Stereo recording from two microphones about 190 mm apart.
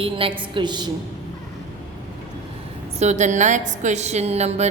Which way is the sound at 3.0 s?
40° right (ahead or behind).